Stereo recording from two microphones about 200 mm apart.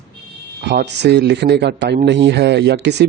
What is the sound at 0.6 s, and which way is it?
Speech, 60° right (ahead or behind).